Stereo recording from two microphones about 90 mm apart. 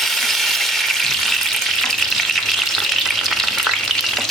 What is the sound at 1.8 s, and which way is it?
Frying, 5° left (ahead or behind).